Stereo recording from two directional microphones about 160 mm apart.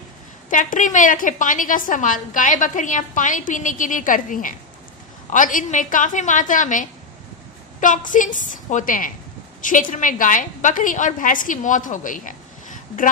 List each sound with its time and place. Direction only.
0.5 s a woman's voice: 55° left (ahead or behind)